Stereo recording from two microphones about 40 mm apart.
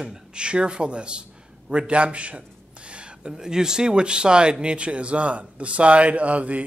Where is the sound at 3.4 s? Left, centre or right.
Centre; by 6.6 s right.